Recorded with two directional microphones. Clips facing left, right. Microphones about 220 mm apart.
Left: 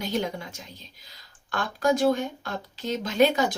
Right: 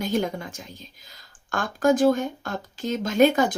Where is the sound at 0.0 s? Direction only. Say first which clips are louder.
Right 3 dB; 50° right (ahead or behind).